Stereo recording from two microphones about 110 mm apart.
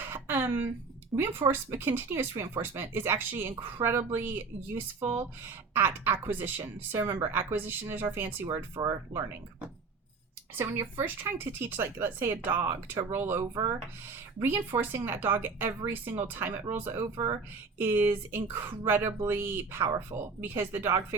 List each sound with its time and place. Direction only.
0.1 s a sound: 20° right (ahead or behind)
1.1 s speech: 20° right (ahead or behind)
8.4 s speech: 50° right (ahead or behind)
10.5 s speech: 20° right (ahead or behind)
13.5 s speech: 35° right (ahead or behind)
14.8 s speech: 20° right (ahead or behind)
17.2 s speech: 45° right (ahead or behind)
17.7 s speech: 20° right (ahead or behind)